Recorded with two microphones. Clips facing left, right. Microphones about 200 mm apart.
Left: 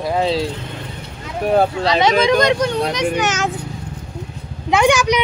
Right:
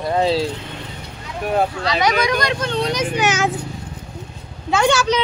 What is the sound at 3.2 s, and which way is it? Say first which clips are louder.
Speech: right 1 dB; 10° right (ahead or behind).